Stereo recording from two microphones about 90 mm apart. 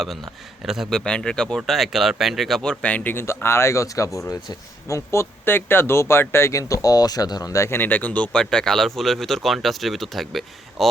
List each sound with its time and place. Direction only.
0.6 s speech: 5° right (ahead or behind); by 7.8 s 35° left (ahead or behind)
7.8 s speech: 20° left (ahead or behind); by 10.8 s centre (ahead or behind)